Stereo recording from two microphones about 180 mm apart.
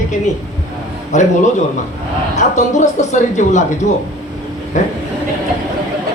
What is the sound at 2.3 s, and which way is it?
A man's voice, 40° left (ahead or behind).